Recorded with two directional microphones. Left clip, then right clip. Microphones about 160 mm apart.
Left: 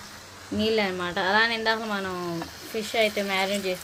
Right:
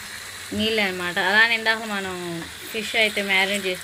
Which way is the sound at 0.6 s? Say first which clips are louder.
Right 2 dB; 10° left (ahead or behind).